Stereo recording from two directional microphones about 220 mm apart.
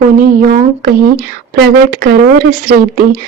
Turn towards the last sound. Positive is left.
turn(degrees=-40)  # may be behind; listen again after turning